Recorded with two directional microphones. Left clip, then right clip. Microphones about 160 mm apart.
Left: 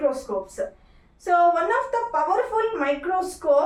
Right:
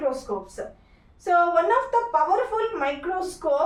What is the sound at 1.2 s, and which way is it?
A woman's voice, 20° right (ahead or behind).